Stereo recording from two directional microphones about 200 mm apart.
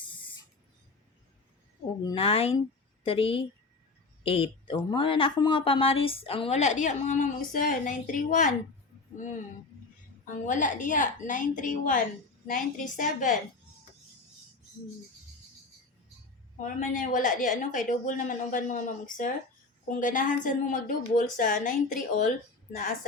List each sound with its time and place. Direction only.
2.0 s a woman's voice: 30° left (ahead or behind)
10.4 s a woman's voice: 40° left (ahead or behind)
16.6 s a woman's voice: 40° left (ahead or behind)